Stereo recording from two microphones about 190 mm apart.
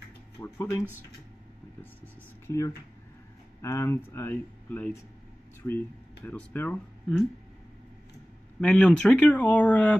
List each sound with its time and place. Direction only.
0.4 s speech: 15° left (ahead or behind)
2.4 s speech: 15° left (ahead or behind)
6.2 s speech: 10° left (ahead or behind)
8.5 s speech: 5° left (ahead or behind)